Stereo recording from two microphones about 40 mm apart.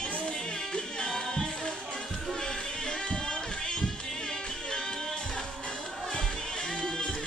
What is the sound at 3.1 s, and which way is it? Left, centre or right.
Music, left.